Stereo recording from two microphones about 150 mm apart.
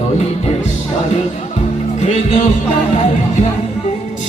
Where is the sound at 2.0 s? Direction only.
50° left (ahead or behind).